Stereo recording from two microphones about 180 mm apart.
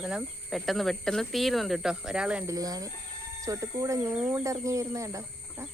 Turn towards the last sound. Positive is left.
turn(degrees=-15)  # may be behind; listen again after turning